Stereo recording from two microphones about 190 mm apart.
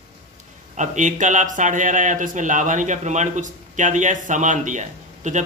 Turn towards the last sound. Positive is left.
turn(degrees=-40)  # may be behind; listen again after turning